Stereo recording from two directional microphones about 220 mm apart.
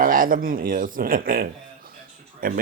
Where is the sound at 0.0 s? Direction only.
40° right (ahead or behind).